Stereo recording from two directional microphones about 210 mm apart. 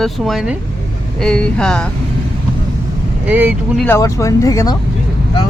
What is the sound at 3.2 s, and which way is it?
Speech, 10° right (ahead or behind).